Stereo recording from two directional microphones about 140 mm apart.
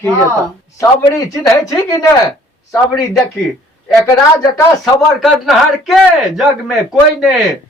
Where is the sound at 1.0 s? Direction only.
25° left (ahead or behind).